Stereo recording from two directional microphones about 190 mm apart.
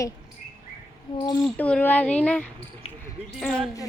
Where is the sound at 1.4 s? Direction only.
5° left (ahead or behind).